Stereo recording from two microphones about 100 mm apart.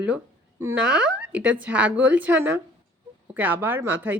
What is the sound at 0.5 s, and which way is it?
Speech, 25° right (ahead or behind).